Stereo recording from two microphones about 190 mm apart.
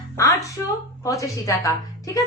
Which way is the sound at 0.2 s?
15° left (ahead or behind).